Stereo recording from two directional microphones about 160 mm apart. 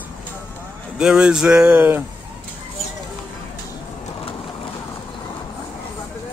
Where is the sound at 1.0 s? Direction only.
5° right (ahead or behind).